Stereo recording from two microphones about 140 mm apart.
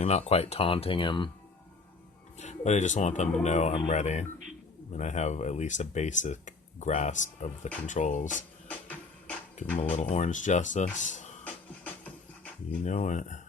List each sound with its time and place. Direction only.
0.0 s speech: 50° left (ahead or behind)
2.4 s speech: 55° left (ahead or behind)
8.6 s music: 10° left (ahead or behind)
9.9 s speech: 50° left (ahead or behind)
11.4 s music: 10° left (ahead or behind)
12.8 s speech: 60° left (ahead or behind)